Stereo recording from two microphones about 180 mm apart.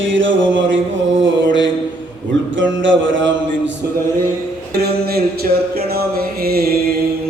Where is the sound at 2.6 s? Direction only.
90° right.